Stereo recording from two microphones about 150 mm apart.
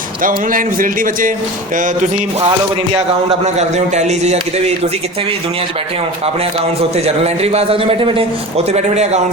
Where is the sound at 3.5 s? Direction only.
50° right (ahead or behind).